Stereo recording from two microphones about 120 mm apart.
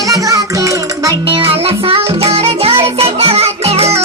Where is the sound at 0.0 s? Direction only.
30° right (ahead or behind).